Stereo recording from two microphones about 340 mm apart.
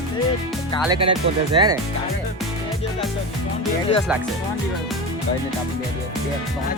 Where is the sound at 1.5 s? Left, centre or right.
Centre.